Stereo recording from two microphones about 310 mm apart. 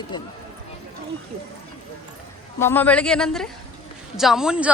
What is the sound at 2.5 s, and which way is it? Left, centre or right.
A woman's voice, centre.